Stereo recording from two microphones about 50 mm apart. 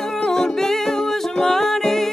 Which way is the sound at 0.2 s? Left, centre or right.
Centre.